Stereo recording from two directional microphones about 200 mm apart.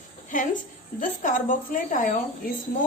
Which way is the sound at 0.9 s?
40° left (ahead or behind).